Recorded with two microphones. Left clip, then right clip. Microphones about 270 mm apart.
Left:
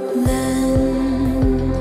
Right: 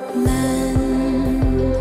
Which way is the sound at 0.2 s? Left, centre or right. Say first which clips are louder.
Right 3 dB; centre.